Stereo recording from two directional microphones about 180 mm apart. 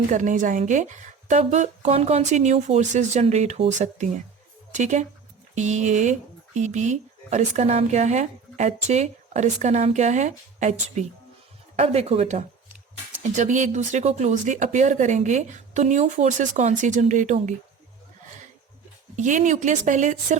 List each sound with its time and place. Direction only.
0.1 s speech: 45° right (ahead or behind)
19.1 s speech: 45° right (ahead or behind)